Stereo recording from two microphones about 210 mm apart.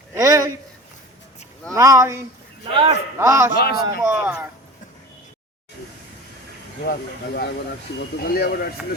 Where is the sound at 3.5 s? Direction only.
45° left (ahead or behind).